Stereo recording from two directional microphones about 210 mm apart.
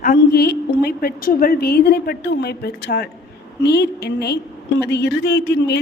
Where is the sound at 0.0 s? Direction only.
45° left (ahead or behind).